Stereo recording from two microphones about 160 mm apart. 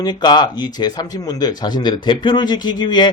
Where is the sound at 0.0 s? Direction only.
25° left (ahead or behind).